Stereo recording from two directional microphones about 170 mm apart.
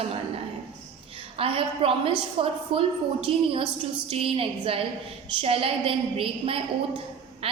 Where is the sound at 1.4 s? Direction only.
35° right (ahead or behind).